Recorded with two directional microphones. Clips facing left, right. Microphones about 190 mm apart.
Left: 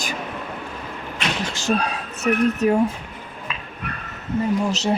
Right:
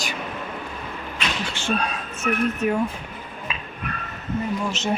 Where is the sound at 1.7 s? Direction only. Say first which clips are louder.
Left 3 dB; 45° left (ahead or behind).